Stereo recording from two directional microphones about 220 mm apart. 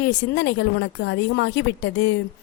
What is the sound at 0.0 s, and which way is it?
A woman's voice, 55° left (ahead or behind).